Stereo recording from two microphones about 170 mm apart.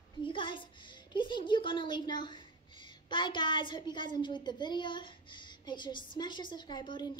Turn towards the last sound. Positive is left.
turn(degrees=25)  # may be behind; listen again after turning